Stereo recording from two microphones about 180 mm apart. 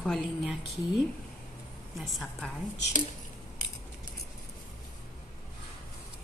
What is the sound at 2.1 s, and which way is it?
Speech, centre (ahead or behind).